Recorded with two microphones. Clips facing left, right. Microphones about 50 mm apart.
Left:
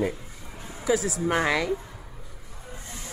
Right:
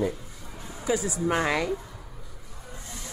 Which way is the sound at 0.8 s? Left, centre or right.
Left.